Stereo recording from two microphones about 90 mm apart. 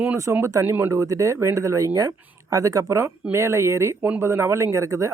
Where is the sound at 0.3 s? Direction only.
25° right (ahead or behind).